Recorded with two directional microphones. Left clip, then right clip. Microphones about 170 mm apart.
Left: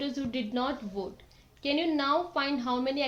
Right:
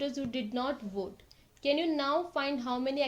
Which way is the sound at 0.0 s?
45° right (ahead or behind).